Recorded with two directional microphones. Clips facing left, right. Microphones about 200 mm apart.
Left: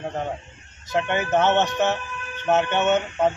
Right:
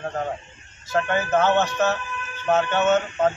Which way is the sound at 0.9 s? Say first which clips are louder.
Even; 20° left (ahead or behind).